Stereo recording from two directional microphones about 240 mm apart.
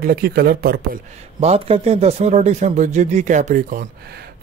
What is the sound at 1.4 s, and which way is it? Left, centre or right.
A man's voice, right.